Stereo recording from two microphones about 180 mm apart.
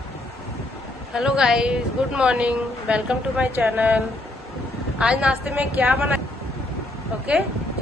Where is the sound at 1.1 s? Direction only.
5° right (ahead or behind).